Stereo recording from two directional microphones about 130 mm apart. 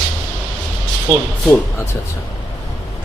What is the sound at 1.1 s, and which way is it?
Speech, 25° right (ahead or behind).